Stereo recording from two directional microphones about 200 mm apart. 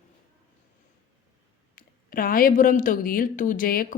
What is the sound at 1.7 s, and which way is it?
A woman's voice, 45° left (ahead or behind).